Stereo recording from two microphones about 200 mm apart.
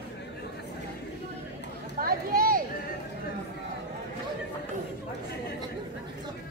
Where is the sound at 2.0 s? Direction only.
45° right (ahead or behind).